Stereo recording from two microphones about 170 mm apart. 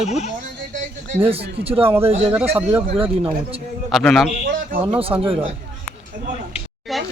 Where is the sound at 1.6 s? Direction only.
35° right (ahead or behind).